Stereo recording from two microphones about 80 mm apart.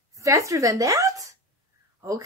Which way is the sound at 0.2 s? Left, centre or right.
Right.